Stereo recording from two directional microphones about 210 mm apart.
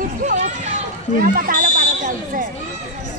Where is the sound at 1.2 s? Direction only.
40° right (ahead or behind).